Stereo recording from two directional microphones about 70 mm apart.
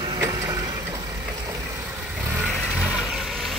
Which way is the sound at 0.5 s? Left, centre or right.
Right.